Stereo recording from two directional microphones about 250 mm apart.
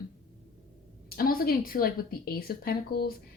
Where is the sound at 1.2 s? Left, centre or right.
Left.